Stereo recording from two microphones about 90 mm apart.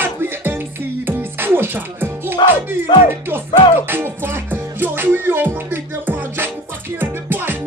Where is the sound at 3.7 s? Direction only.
25° right (ahead or behind).